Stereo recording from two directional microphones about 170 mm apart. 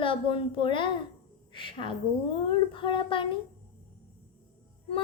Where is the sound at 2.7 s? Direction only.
30° left (ahead or behind).